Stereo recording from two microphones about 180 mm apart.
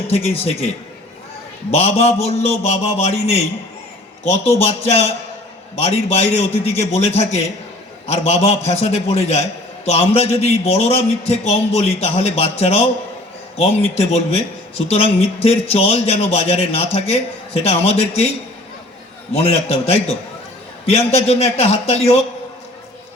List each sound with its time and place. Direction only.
1.7 s a man's voice: 35° left (ahead or behind)
4.6 s a man's voice: 35° left (ahead or behind)
19.3 s a man's voice: 35° left (ahead or behind)